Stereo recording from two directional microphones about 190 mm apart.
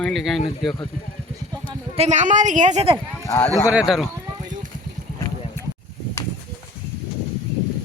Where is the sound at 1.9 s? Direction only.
35° right (ahead or behind).